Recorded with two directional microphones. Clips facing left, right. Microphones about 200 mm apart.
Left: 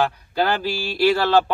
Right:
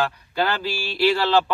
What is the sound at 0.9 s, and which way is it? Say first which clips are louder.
Speech: left 2 dB; 50° left (ahead or behind).